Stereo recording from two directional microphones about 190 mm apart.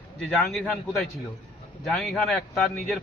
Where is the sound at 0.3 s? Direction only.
Centre (ahead or behind).